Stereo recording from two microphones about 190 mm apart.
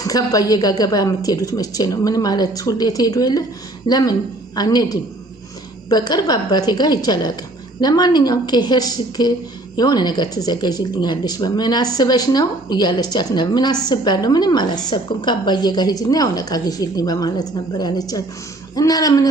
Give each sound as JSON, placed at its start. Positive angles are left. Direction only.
{"t": 0.0, "sound": "speech", "side_deg": 20}